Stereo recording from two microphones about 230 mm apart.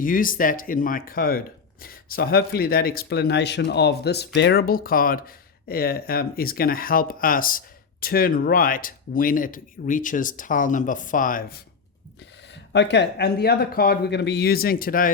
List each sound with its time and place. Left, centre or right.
0.0 s speech: left
12.7 s speech: left